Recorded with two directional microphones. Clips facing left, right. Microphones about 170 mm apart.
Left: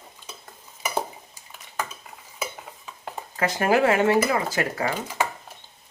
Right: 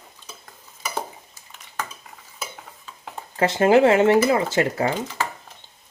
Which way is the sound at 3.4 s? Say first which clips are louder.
Right 5 dB; 25° right (ahead or behind).